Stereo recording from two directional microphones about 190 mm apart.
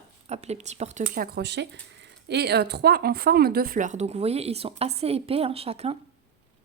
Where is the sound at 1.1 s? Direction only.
55° right (ahead or behind); by 6.0 s 30° right (ahead or behind).